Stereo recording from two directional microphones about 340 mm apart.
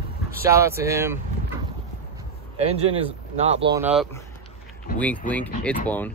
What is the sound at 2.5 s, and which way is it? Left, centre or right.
Speech, centre.